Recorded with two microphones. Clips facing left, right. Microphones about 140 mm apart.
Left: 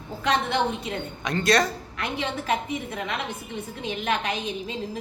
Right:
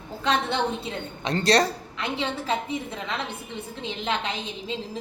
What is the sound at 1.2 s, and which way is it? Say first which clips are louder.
A woman's voice: right 1 dB; 30° right (ahead or behind).